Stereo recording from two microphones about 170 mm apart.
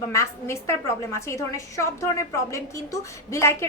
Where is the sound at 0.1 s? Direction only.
15° left (ahead or behind).